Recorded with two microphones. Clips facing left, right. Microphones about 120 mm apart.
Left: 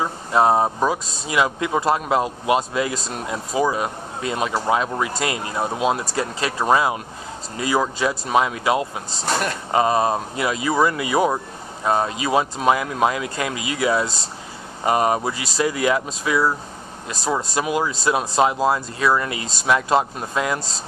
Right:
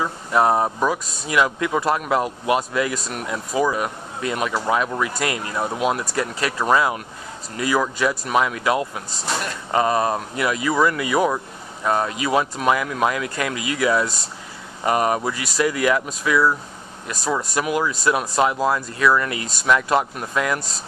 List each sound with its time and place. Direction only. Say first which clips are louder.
0.0 s speech: left 1 dB; 25° left (ahead or behind)